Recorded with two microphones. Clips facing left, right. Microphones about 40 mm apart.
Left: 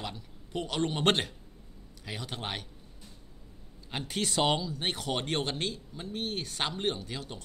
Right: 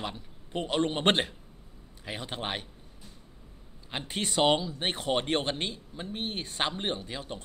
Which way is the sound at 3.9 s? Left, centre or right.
Centre.